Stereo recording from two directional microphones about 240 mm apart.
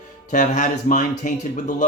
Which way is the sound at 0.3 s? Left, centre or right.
Left.